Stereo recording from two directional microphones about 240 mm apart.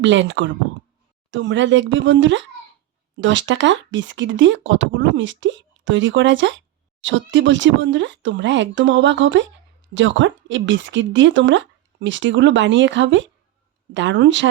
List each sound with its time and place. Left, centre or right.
0.0 s speech: right